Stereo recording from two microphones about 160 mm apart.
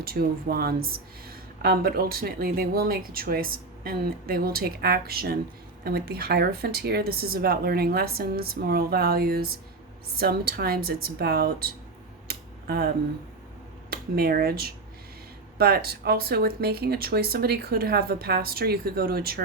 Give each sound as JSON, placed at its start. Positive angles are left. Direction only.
{"t": 0.0, "sound": "speech", "side_deg": -70}
{"t": 12.3, "sound": "a sound", "side_deg": -75}
{"t": 13.9, "sound": "speech", "side_deg": -70}